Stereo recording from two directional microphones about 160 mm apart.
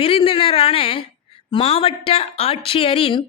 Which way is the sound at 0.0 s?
35° left (ahead or behind).